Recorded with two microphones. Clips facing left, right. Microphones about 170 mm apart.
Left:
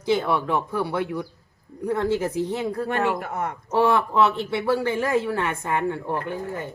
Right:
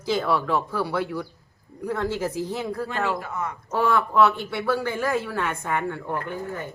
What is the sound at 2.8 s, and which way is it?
Speech, 60° left (ahead or behind).